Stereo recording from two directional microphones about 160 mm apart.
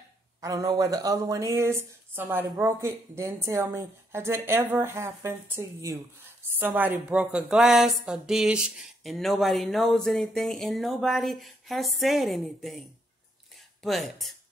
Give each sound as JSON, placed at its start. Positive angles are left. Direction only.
{"t": 0.4, "sound": "a woman's voice", "side_deg": -25}
{"t": 13.8, "sound": "speech", "side_deg": 0}